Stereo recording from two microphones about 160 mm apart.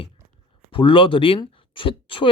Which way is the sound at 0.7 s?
35° left (ahead or behind).